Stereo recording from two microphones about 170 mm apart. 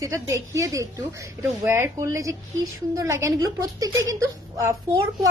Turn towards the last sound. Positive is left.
turn(degrees=-15)  # may be behind; listen again after turning